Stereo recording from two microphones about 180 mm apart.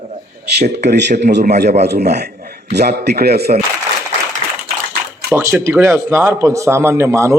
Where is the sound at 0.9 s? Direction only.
70° right (ahead or behind).